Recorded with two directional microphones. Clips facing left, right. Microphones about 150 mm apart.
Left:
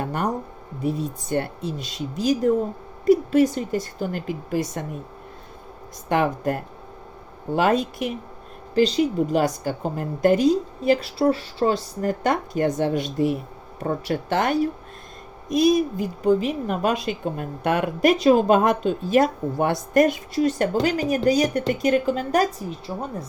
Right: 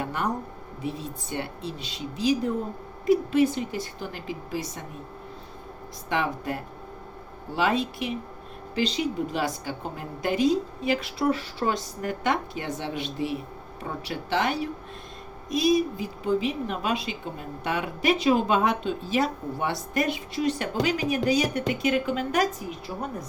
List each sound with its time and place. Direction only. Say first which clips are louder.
0.0 s a sound: left 4 dB; 40° left (ahead or behind)
0.8 s a woman's voice: left 7 dB; 45° left (ahead or behind)
6.1 s a woman's voice: left 6 dB; 45° left (ahead or behind)